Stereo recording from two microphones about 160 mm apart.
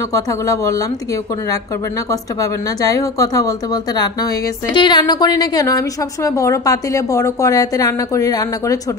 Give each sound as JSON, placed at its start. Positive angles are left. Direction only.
{"t": 0.1, "sound": "speech", "side_deg": 20}
{"t": 2.0, "sound": "speech", "side_deg": 20}